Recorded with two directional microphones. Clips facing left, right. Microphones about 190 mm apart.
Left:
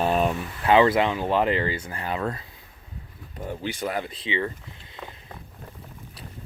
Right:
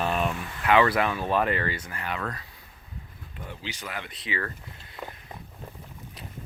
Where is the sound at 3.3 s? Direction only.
50° left (ahead or behind); by 4.5 s 25° left (ahead or behind).